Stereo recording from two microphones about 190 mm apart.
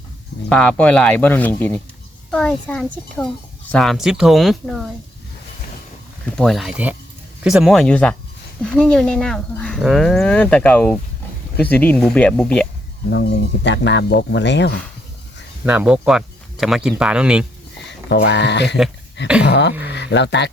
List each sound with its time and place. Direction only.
0.5 s speech: 5° left (ahead or behind)
6.3 s speech: centre (ahead or behind)
13.7 s speech: 70° left (ahead or behind)
15.6 s speech: 10° right (ahead or behind)
17.8 s speech: 65° left (ahead or behind)